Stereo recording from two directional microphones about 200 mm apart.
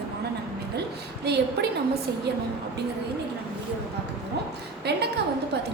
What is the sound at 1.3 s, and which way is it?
Speech, 55° right (ahead or behind).